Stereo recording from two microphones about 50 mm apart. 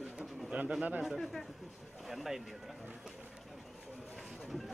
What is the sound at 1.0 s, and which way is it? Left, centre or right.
Speech, centre.